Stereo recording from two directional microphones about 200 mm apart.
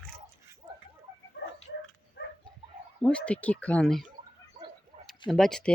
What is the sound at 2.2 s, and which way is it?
Dog, 60° left (ahead or behind).